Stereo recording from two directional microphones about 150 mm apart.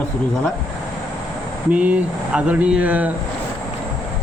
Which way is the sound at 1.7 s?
10° right (ahead or behind).